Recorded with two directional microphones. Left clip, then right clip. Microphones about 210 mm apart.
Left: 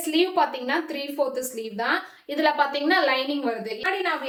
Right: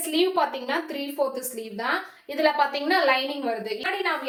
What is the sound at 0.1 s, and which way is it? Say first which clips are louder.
A woman's voice: left 1 dB; 15° left (ahead or behind).